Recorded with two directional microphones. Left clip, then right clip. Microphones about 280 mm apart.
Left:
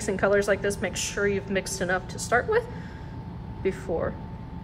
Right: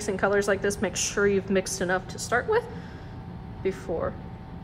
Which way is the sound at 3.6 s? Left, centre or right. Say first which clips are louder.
Left 1 dB; centre.